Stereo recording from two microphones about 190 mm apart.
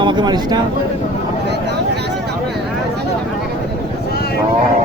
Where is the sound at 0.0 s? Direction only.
25° right (ahead or behind).